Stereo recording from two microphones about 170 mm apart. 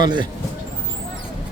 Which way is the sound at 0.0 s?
25° right (ahead or behind).